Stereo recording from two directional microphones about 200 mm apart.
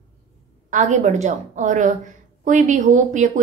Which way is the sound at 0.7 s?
35° right (ahead or behind).